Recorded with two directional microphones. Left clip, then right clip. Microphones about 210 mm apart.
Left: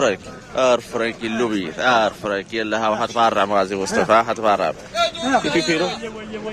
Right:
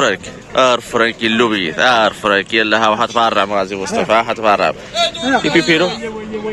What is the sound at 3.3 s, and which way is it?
A man's voice, 20° left (ahead or behind).